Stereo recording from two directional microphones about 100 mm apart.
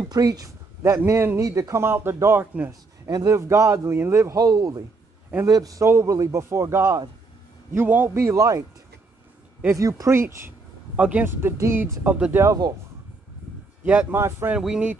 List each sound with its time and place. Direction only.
0.0 s a man's voice: 40° right (ahead or behind)
3.1 s a man's voice: 35° right (ahead or behind)
4.4 s a man's voice: 40° right (ahead or behind)
9.8 s a man's voice: 35° right (ahead or behind)
11.0 s speech: 15° right (ahead or behind)
11.2 s a man's voice: 25° right (ahead or behind)
12.4 s speech: 40° right (ahead or behind)
14.1 s a man's voice: 25° right (ahead or behind)
14.6 s speech: 5° right (ahead or behind)